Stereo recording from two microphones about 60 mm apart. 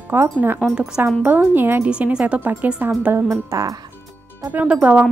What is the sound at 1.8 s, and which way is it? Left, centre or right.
Speech, centre.